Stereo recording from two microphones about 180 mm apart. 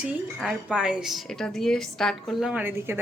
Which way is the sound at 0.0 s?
5° right (ahead or behind).